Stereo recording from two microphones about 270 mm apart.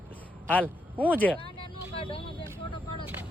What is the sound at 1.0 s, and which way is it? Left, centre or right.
Speech, centre.